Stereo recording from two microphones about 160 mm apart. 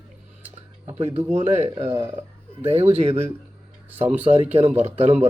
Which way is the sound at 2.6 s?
35° right (ahead or behind).